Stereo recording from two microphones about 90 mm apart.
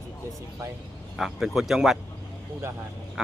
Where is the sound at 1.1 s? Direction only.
5° right (ahead or behind).